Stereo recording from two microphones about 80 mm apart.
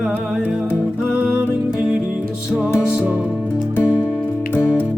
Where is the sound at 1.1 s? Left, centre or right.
Centre.